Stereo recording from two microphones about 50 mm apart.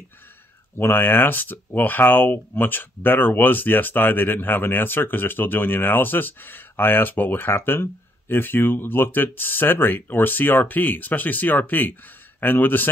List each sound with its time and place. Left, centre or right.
0.7 s speech: left